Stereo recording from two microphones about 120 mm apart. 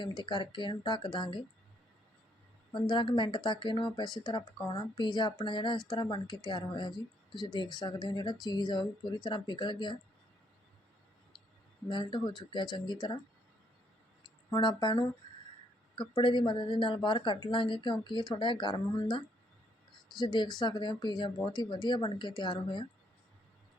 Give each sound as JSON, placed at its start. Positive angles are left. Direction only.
{"t": 0.0, "sound": "speech", "side_deg": 40}
{"t": 2.7, "sound": "speech", "side_deg": 40}
{"t": 11.9, "sound": "speech", "side_deg": 40}
{"t": 14.5, "sound": "a woman's voice", "side_deg": 40}